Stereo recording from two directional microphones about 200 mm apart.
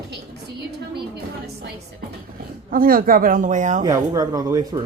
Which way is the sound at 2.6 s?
45° right (ahead or behind).